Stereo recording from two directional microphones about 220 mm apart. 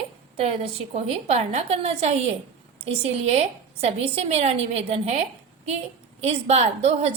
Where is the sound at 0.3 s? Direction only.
25° right (ahead or behind).